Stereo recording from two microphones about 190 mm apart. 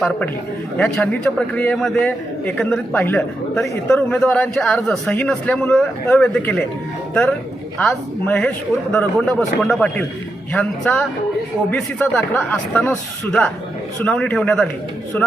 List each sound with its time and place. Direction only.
0.8 s a man's voice: 5° left (ahead or behind)